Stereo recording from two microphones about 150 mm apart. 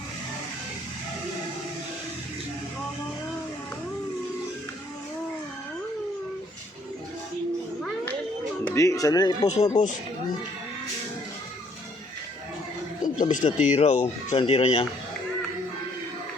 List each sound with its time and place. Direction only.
8.7 s speech: 20° left (ahead or behind)
9.4 s speech: 45° left (ahead or behind)
13.0 s speech: 60° left (ahead or behind); by 14.8 s 40° left (ahead or behind)